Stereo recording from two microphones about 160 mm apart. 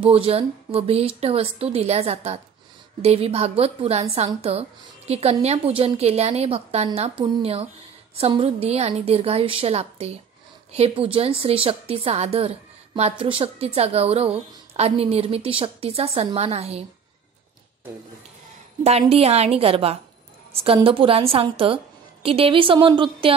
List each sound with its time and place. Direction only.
0.0 s a woman's voice: 35° right (ahead or behind)
18.9 s a woman's voice: 40° right (ahead or behind)